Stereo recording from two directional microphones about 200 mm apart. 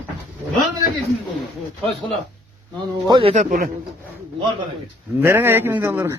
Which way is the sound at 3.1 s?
25° right (ahead or behind).